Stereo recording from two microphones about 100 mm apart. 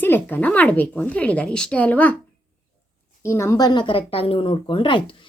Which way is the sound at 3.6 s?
50° left (ahead or behind).